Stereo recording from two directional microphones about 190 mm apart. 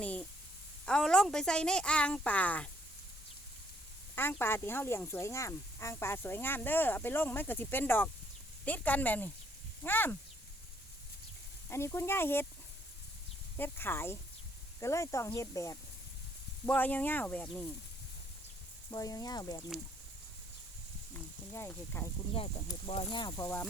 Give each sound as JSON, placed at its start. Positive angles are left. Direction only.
{"t": 0.0, "sound": "a sound", "side_deg": 5}
{"t": 0.9, "sound": "speech", "side_deg": 5}
{"t": 4.1, "sound": "speech", "side_deg": 10}
{"t": 11.7, "sound": "speech", "side_deg": 15}
{"t": 13.6, "sound": "speech", "side_deg": 10}
{"t": 18.9, "sound": "speech", "side_deg": 20}
{"t": 21.5, "sound": "speech", "side_deg": 10}
{"t": 22.4, "sound": "speech", "side_deg": 30}